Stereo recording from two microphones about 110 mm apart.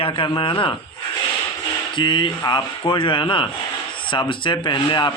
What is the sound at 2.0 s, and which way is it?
Speech, 45° left (ahead or behind).